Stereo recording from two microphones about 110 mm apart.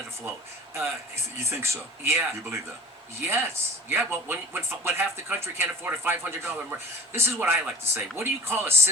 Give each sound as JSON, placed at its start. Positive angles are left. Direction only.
{"t": 0.7, "sound": "a man's voice", "side_deg": -25}